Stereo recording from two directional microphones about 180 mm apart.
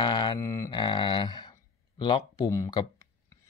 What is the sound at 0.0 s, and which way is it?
Mantra, 25° left (ahead or behind).